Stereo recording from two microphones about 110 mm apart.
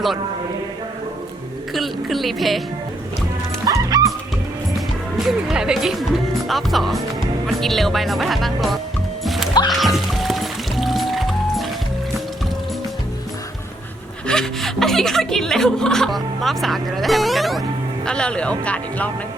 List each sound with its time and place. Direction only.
1.7 s speech: centre (ahead or behind)
3.7 s music: 30° right (ahead or behind)
5.1 s speech: 5° right (ahead or behind)
9.2 s music: centre (ahead or behind)
14.3 s speech: 5° left (ahead or behind)